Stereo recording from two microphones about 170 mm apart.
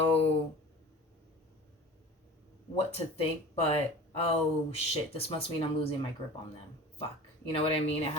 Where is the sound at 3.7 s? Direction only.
35° left (ahead or behind).